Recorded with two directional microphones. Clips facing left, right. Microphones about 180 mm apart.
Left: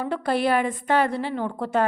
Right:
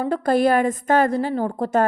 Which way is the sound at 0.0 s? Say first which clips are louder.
Right 5 dB; 45° right (ahead or behind).